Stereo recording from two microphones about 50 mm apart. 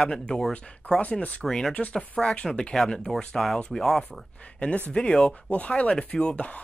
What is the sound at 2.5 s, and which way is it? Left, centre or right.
Speech, centre.